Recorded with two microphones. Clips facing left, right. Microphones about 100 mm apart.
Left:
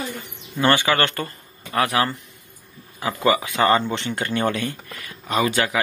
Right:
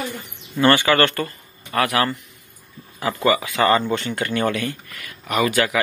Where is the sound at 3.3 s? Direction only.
20° left (ahead or behind).